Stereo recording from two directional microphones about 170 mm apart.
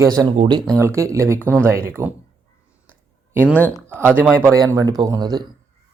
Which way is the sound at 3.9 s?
15° right (ahead or behind).